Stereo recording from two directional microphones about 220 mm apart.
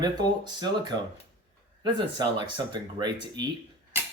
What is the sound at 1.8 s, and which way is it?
Speech, 20° right (ahead or behind).